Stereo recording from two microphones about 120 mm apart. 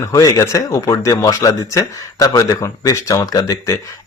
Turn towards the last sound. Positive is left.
turn(degrees=30)  # may be behind; listen again after turning